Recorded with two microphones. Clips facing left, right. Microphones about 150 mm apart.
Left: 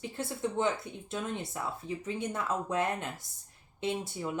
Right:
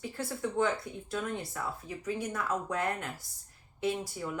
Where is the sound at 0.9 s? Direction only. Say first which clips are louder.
Right 2 dB; 20° left (ahead or behind).